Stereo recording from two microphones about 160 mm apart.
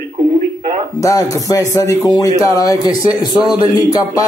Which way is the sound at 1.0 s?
20° left (ahead or behind).